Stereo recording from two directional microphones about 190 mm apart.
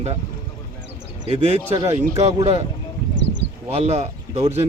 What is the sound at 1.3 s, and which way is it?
Speech, 35° right (ahead or behind).